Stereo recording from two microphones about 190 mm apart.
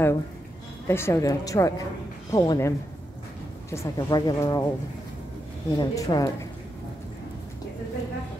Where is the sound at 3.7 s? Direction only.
15° left (ahead or behind).